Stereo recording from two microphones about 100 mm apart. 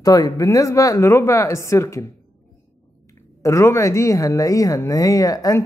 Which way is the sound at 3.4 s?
30° left (ahead or behind).